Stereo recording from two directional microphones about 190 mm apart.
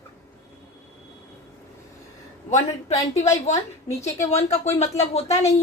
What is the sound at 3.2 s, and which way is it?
Speech, 35° left (ahead or behind).